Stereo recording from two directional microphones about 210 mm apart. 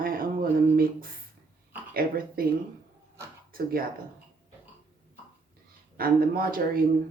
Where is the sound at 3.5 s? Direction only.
45° right (ahead or behind).